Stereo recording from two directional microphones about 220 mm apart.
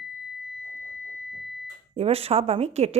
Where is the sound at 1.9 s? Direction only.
25° right (ahead or behind).